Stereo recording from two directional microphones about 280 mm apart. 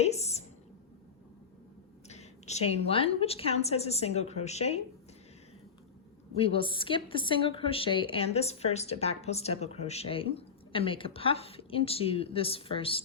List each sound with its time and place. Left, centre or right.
0.0 s a sound: left
2.0 s a woman's voice: left
6.3 s a woman's voice: centre